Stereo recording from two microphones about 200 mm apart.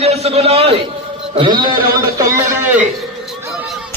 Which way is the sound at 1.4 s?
25° right (ahead or behind).